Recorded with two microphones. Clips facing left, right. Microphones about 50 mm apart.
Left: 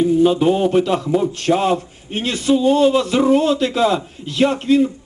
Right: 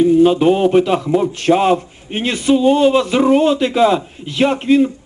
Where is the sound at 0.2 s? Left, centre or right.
Right.